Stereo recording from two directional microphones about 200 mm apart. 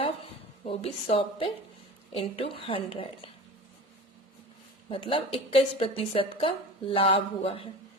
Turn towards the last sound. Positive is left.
turn(degrees=30)  # may be behind; listen again after turning